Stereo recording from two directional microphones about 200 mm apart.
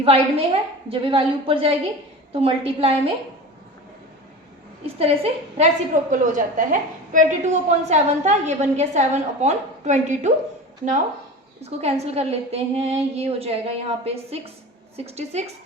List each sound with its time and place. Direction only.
0.0 s a woman's voice: 30° right (ahead or behind)
4.9 s a woman's voice: 30° right (ahead or behind)
11.6 s a woman's voice: 30° right (ahead or behind)